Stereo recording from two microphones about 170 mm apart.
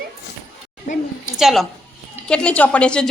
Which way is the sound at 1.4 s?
Centre (ahead or behind).